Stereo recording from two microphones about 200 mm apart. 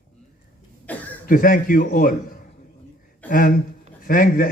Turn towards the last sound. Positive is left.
turn(degrees=45)  # may be behind; listen again after turning